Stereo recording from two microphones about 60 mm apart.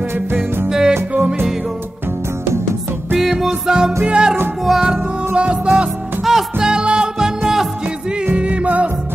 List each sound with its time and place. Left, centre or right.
0.3 s music: right
0.7 s music: centre
3.2 s music: centre
5.3 s music: centre
6.2 s music: centre